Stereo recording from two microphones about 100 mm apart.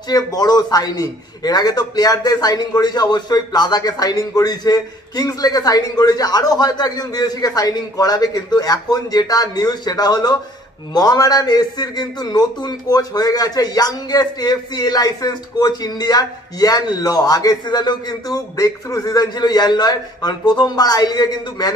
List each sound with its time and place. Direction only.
0.1 s a man's voice: 40° left (ahead or behind)